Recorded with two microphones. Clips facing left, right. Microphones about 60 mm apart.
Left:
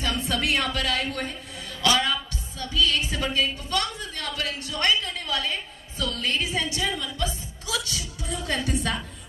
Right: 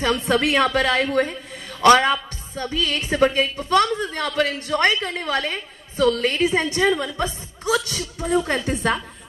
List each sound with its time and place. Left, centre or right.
0.0 s a woman's voice: right